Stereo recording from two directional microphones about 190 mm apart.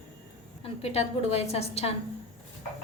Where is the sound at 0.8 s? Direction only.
30° left (ahead or behind).